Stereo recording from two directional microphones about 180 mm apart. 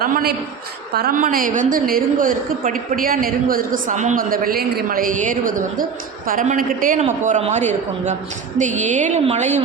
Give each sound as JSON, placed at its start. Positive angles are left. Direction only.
{"t": 0.0, "sound": "a woman's voice", "side_deg": -55}